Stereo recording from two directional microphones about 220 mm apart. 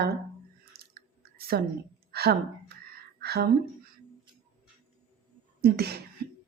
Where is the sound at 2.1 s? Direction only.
45° right (ahead or behind).